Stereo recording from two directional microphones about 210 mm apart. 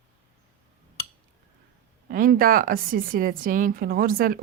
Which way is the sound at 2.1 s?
40° right (ahead or behind).